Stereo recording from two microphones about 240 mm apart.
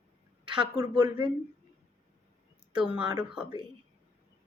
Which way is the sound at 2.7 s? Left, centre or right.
Right.